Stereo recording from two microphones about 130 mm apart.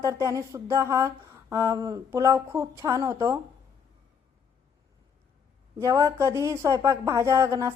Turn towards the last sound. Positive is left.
turn(degrees=-20)  # may be behind; listen again after turning